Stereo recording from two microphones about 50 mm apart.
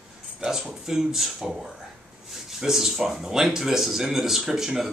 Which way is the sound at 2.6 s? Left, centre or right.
Centre.